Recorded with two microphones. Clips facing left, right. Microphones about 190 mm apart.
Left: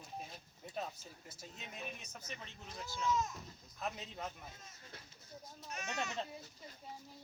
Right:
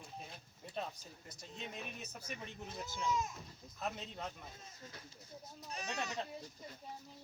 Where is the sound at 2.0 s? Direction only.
10° right (ahead or behind).